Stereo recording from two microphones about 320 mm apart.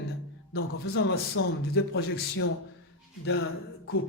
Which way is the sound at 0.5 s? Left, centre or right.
Left.